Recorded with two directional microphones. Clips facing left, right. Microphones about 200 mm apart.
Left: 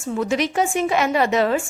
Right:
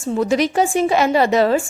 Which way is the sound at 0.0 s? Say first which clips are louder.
Right 4 dB; 35° right (ahead or behind).